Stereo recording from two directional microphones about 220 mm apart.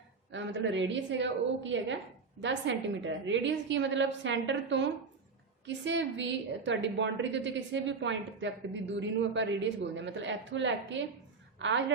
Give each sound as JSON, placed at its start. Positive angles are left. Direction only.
{"t": 0.3, "sound": "a woman's voice", "side_deg": -55}